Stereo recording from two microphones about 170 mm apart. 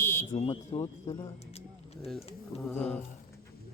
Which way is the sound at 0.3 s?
30° left (ahead or behind).